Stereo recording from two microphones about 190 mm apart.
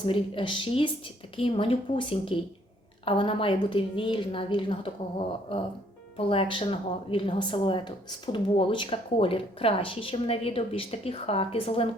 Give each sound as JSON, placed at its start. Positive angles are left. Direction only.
{"t": 0.0, "sound": "a woman's voice", "side_deg": 25}
{"t": 6.1, "sound": "a woman's voice", "side_deg": 30}